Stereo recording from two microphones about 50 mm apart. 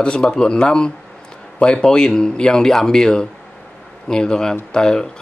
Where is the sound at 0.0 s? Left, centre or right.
Centre.